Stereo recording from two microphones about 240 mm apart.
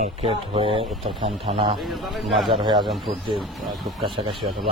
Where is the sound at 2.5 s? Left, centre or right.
Centre.